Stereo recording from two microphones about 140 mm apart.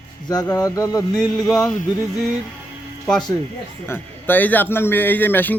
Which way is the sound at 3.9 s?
15° left (ahead or behind).